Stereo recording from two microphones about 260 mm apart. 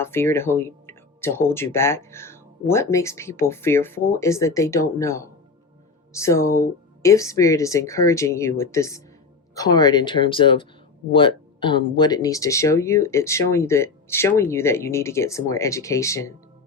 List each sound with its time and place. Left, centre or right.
0.0 s speech: centre